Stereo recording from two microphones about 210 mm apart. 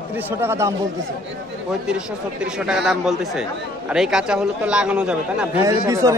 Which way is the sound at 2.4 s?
5° right (ahead or behind).